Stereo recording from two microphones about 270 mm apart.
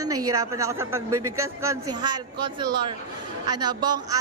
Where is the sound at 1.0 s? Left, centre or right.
Right.